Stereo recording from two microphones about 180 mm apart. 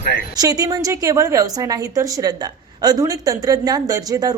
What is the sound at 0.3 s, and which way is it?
A woman's voice, 20° right (ahead or behind).